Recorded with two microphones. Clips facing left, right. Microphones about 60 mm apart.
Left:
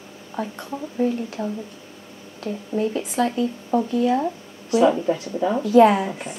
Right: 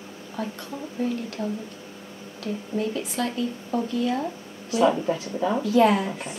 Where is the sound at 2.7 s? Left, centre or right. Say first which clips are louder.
Left 5 dB; centre.